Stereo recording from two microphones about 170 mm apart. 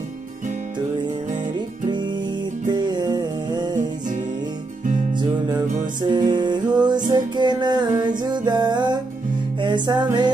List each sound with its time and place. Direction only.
2.7 s music: 25° right (ahead or behind)
5.5 s music: 25° right (ahead or behind)